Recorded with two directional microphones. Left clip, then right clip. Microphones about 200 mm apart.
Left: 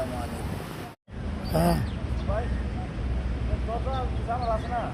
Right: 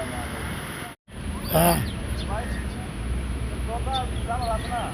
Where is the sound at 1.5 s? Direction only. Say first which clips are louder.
Right 5 dB; 5° right (ahead or behind).